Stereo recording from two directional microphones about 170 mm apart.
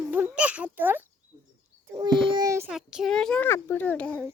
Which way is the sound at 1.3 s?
20° right (ahead or behind).